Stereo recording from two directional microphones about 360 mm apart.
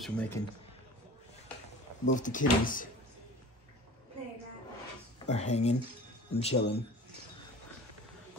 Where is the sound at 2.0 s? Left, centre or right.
Left.